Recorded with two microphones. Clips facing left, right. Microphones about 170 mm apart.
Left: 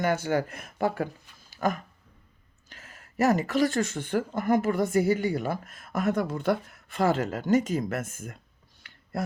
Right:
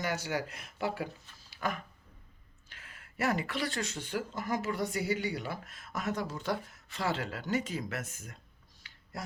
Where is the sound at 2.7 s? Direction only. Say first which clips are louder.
Left 5 dB; 40° left (ahead or behind).